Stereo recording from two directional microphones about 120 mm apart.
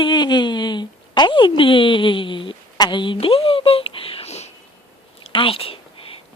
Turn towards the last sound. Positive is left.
turn(degrees=50)  # may be behind; listen again after turning